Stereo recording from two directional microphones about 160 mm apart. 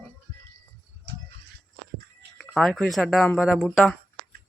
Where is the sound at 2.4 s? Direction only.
Centre (ahead or behind).